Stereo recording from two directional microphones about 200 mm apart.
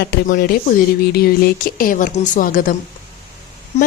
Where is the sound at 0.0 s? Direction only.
50° left (ahead or behind).